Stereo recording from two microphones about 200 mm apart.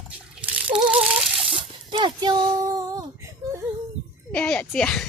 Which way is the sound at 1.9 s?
20° right (ahead or behind).